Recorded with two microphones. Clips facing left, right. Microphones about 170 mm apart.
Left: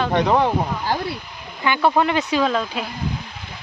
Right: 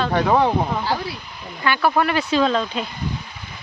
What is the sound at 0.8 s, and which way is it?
Speech, 45° left (ahead or behind).